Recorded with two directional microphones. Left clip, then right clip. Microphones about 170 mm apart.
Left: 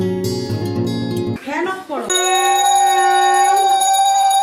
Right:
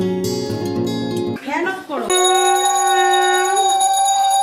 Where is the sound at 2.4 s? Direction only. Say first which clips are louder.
Left 2 dB; centre (ahead or behind).